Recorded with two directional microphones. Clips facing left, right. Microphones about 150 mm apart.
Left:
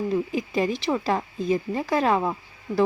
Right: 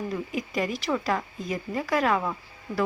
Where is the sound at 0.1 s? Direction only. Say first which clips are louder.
Left 5 dB; 30° left (ahead or behind).